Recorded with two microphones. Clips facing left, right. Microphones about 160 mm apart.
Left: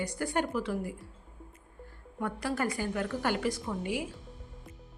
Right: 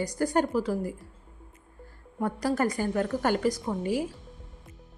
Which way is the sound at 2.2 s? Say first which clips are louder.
Right 5 dB; 40° right (ahead or behind).